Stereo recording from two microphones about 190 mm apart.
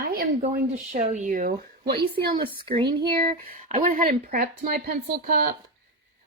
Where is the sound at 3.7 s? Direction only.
40° right (ahead or behind).